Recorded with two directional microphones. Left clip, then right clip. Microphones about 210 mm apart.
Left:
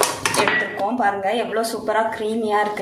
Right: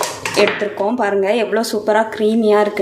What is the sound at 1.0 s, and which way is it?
A woman's voice, 45° right (ahead or behind).